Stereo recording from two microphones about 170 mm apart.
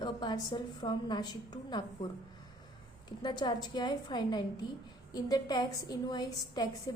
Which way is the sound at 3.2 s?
25° left (ahead or behind).